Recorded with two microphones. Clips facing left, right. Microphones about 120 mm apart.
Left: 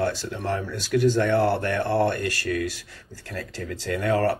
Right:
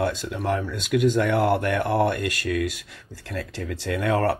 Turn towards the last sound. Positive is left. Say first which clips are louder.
# even
turn(degrees=-20)  # may be behind; listen again after turning